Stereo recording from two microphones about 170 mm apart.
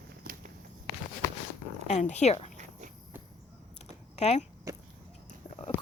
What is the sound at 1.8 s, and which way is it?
Speech, 45° left (ahead or behind).